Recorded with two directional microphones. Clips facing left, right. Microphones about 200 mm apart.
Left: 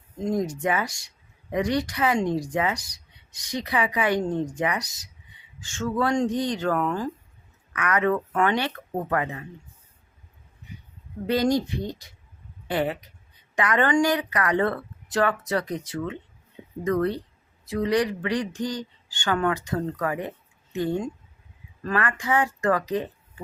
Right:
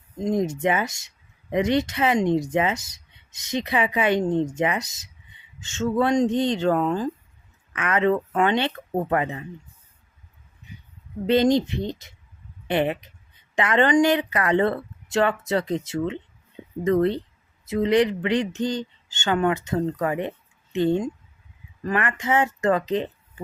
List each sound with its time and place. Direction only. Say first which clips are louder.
0.2 s speech: right 3 dB; 20° right (ahead or behind)
11.3 s speech: right 4 dB; 20° right (ahead or behind)